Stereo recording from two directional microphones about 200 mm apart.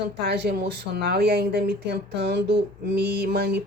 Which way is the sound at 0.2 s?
55° right (ahead or behind).